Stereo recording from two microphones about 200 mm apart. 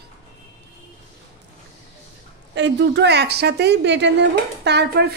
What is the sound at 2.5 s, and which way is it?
A woman's voice, 60° right (ahead or behind).